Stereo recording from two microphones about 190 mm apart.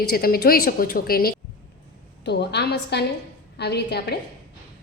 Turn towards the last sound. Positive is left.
turn(degrees=60)  # may be behind; listen again after turning